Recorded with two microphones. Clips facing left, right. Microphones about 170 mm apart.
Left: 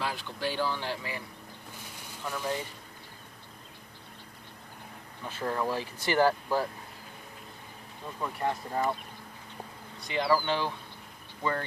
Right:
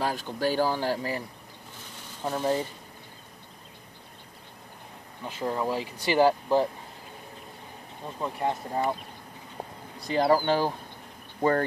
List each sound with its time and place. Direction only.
0.0 s speech: 45° right (ahead or behind)
2.2 s speech: 35° right (ahead or behind)
5.2 s speech: 15° right (ahead or behind)
8.2 s speech: 20° right (ahead or behind)
10.0 s speech: 45° right (ahead or behind)